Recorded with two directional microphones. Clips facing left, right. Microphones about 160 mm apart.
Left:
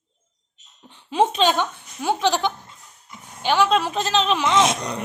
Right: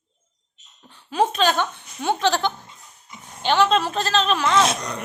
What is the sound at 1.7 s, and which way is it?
Speech, 10° left (ahead or behind).